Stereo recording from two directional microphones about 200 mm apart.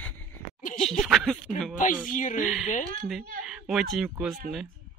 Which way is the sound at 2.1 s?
40° left (ahead or behind).